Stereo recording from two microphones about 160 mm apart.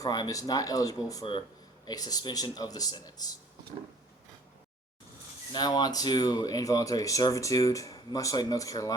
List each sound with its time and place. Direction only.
0.0 s speech: 25° left (ahead or behind)
5.5 s speech: 25° left (ahead or behind)